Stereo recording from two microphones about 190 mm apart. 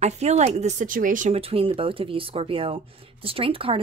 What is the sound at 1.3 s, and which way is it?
Speech, 30° right (ahead or behind).